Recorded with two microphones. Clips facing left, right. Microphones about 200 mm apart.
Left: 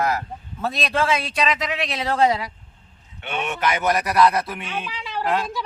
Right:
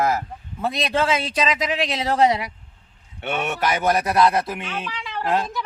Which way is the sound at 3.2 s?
45° right (ahead or behind).